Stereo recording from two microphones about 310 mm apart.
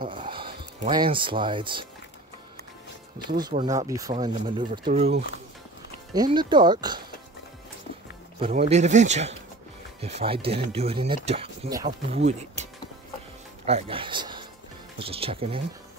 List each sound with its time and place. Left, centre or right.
0.1 s speech: centre
3.3 s speech: centre
8.4 s speech: centre
13.7 s speech: centre